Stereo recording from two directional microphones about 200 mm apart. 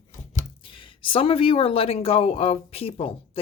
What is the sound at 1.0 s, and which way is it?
Speech, 25° left (ahead or behind).